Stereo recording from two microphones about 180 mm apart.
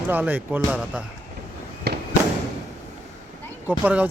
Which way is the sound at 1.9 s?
65° right (ahead or behind).